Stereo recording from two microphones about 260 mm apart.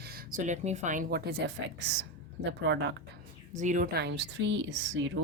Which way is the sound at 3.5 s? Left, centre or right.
Right.